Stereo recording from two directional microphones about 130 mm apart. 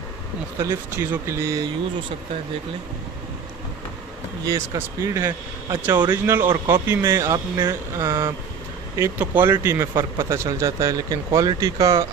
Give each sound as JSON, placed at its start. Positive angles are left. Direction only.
{"t": 1.2, "sound": "speech", "side_deg": -20}
{"t": 4.5, "sound": "speech", "side_deg": -25}